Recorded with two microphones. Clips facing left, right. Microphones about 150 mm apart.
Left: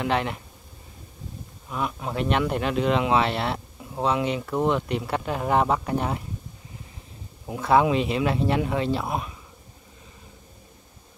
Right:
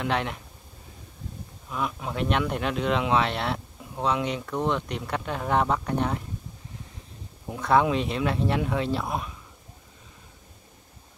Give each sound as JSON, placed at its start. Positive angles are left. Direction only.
{"t": 0.0, "sound": "speech", "side_deg": 0}
{"t": 1.7, "sound": "speech", "side_deg": 0}
{"t": 7.4, "sound": "speech", "side_deg": 5}